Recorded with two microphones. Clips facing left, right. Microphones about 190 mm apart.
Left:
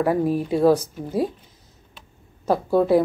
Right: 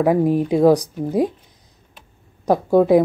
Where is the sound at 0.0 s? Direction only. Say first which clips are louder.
Right 4 dB; 15° right (ahead or behind).